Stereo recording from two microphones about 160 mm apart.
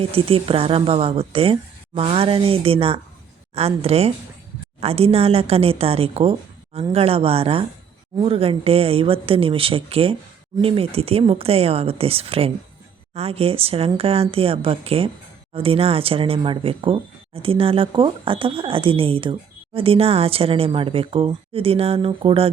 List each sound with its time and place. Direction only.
0.0 s speech: 35° right (ahead or behind)